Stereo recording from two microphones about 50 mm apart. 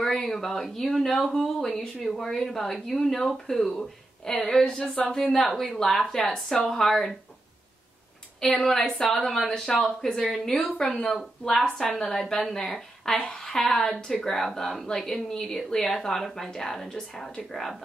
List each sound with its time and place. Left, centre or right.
0.0 s speech: centre
8.4 s speech: centre
13.1 s a woman's voice: left
13.5 s speech: centre